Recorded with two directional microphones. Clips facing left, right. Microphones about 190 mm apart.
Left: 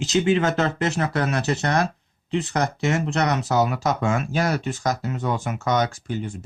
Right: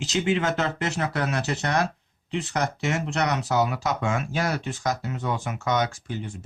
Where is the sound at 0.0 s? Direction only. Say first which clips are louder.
Left 4 dB; 45° left (ahead or behind).